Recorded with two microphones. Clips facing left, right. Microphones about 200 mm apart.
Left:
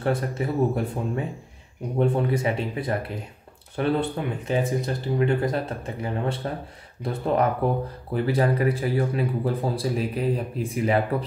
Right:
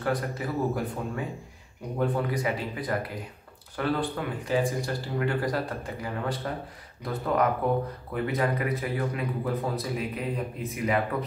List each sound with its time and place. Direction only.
0.0 s speech: 25° left (ahead or behind)